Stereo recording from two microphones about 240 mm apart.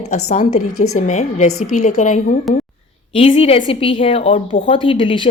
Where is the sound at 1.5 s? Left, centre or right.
Left.